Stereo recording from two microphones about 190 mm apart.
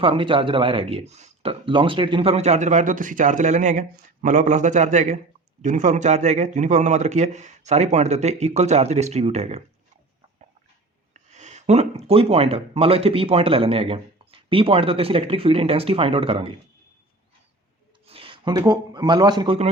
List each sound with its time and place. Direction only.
0.0 s a man's voice: 30° right (ahead or behind)
11.1 s speech: 35° right (ahead or behind)
18.0 s speech: 30° right (ahead or behind)